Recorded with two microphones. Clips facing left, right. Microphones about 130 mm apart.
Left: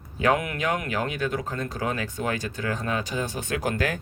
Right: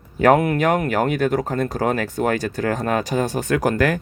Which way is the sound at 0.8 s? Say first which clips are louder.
Right 8 dB; 50° right (ahead or behind).